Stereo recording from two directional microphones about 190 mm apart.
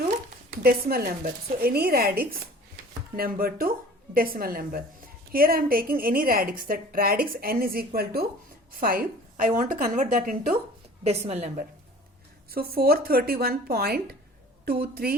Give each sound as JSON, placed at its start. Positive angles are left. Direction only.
{"t": 0.6, "sound": "a woman's voice", "side_deg": -55}
{"t": 11.0, "sound": "a woman's voice", "side_deg": -35}
{"t": 12.5, "sound": "a woman's voice", "side_deg": -50}